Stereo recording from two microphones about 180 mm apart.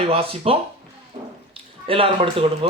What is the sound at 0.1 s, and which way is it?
Speech, 30° right (ahead or behind).